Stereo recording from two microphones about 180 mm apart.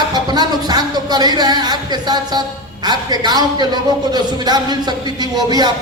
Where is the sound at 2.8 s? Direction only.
25° right (ahead or behind).